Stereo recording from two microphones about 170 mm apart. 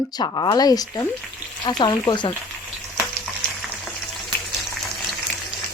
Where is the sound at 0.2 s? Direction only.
25° left (ahead or behind).